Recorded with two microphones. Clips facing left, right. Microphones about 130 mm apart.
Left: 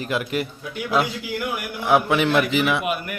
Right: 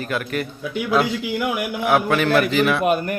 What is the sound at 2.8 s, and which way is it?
Speech, 40° right (ahead or behind).